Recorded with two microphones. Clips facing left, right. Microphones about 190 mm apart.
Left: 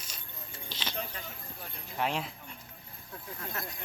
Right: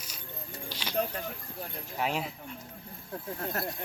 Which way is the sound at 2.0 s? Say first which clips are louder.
Right 1 dB; 5° right (ahead or behind).